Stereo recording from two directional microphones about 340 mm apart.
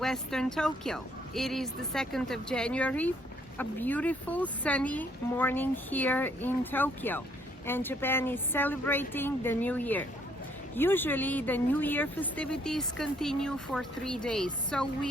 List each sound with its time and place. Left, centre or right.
0.0 s speech: centre